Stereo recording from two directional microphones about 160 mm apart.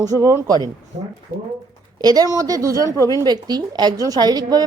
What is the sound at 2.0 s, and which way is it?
Speech, 25° right (ahead or behind).